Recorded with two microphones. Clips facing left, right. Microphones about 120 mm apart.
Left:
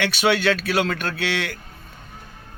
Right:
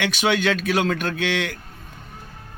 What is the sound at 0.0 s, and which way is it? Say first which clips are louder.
A man's voice: left 1 dB; 15° right (ahead or behind).